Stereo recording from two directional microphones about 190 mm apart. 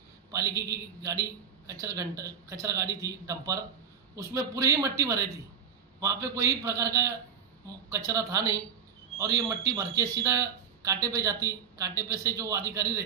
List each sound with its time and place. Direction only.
0.3 s a man's voice: 15° right (ahead or behind)